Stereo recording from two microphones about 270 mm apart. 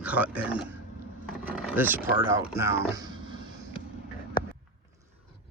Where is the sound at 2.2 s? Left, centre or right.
Centre.